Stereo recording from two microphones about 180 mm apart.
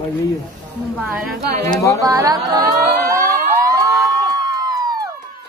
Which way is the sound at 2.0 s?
20° right (ahead or behind).